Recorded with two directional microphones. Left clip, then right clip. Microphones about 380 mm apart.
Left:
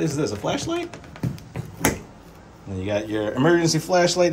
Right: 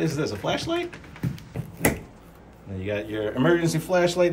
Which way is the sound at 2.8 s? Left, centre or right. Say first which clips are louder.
Left 3 dB; centre.